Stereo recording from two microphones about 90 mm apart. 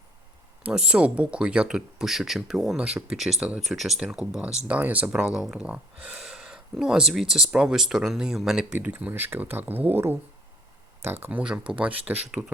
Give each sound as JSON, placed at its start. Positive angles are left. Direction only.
{"t": 0.6, "sound": "speech", "side_deg": -10}
{"t": 8.8, "sound": "speech", "side_deg": -15}
{"t": 11.3, "sound": "speech", "side_deg": -15}